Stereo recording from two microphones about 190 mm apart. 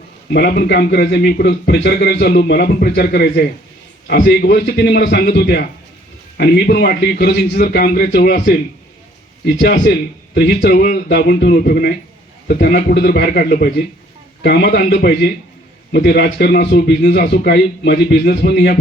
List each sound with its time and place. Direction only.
0.3 s a man's voice: 55° left (ahead or behind)